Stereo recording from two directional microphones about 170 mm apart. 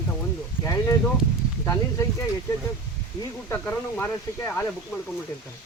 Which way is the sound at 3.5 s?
15° left (ahead or behind).